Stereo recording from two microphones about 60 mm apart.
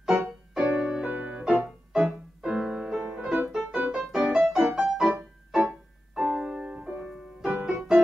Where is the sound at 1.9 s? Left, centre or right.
Centre.